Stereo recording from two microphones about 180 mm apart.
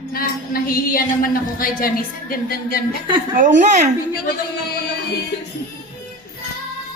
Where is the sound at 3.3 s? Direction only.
45° right (ahead or behind).